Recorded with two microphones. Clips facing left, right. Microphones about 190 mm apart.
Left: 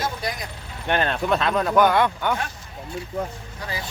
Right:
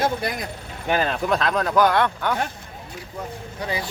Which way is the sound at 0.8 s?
5° right (ahead or behind).